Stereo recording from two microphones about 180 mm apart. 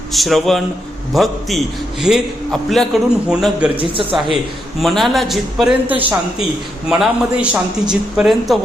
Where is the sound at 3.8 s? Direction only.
30° right (ahead or behind).